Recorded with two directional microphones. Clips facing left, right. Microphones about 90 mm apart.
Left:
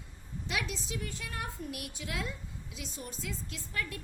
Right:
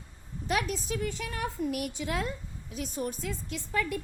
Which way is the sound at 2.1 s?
45° right (ahead or behind).